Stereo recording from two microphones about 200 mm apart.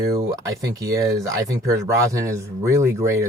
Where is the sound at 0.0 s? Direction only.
15° right (ahead or behind).